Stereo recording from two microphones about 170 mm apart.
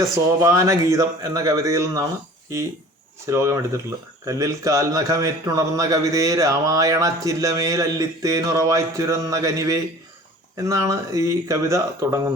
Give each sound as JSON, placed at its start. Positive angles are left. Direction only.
{"t": 0.4, "sound": "speech", "side_deg": -20}
{"t": 3.2, "sound": "speech", "side_deg": -15}